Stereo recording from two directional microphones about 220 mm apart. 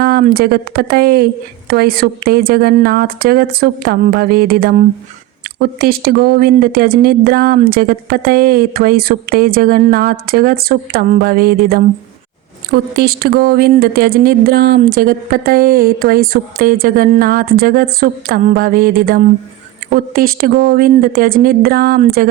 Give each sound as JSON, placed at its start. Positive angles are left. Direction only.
{"t": 0.0, "sound": "speech", "side_deg": -45}